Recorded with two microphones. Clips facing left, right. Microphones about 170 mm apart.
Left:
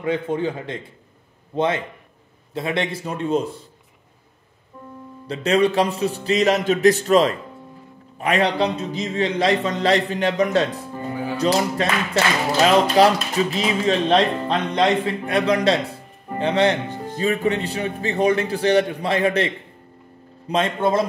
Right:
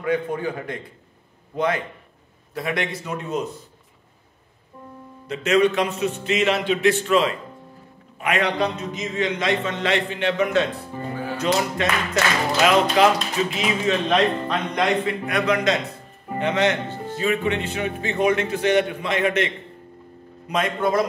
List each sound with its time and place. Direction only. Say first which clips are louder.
0.0 s a man's voice: left 1 dB; 25° left (ahead or behind)
5.2 s a man's voice: even; 30° left (ahead or behind)
11.0 s music: left 2 dB; 15° left (ahead or behind)
11.3 s a man's voice: left 3 dB; 35° left (ahead or behind)
16.8 s music: left 1 dB; 15° left (ahead or behind)
17.2 s a man's voice: left 2 dB; 35° left (ahead or behind)